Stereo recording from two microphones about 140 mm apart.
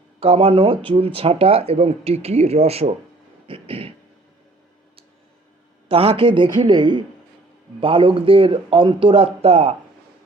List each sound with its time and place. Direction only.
0.2 s speech: 45° right (ahead or behind)
3.4 s a sound: 40° right (ahead or behind)
5.9 s speech: 40° right (ahead or behind)